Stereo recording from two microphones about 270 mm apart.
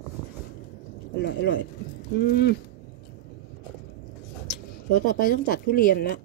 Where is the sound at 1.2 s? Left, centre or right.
Left.